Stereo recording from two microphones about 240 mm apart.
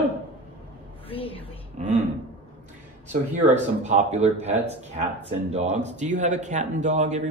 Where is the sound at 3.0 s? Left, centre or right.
Right.